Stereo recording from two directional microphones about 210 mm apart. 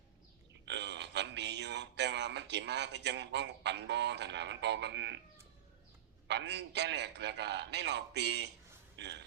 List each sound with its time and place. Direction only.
0.6 s speech: 55° right (ahead or behind)
6.2 s a man's voice: 55° right (ahead or behind)